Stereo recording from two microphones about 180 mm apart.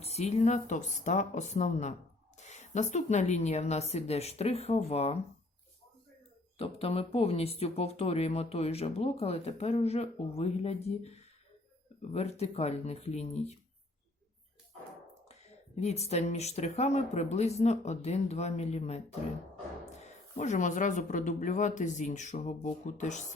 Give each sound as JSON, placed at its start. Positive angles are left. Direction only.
{"t": 0.0, "sound": "speech", "side_deg": 35}
{"t": 6.6, "sound": "speech", "side_deg": 30}
{"t": 15.3, "sound": "speech", "side_deg": 35}